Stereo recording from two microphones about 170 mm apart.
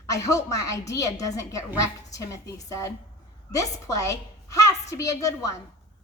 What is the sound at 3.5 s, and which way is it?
A woman's voice, 20° left (ahead or behind).